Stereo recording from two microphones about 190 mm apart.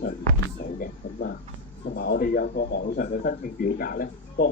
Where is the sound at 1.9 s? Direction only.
55° left (ahead or behind).